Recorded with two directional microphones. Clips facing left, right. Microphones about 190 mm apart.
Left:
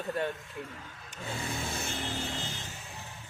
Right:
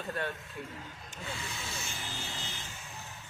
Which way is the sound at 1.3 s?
50° left (ahead or behind).